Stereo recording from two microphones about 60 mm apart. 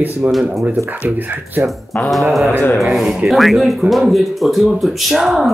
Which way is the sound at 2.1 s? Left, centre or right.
Centre.